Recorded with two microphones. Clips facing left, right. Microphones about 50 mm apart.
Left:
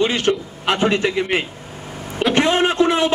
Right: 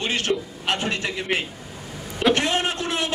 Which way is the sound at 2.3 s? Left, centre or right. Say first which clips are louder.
Left 7 dB; left.